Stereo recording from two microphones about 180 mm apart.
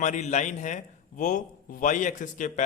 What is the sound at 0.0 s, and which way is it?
A man's voice, 40° left (ahead or behind).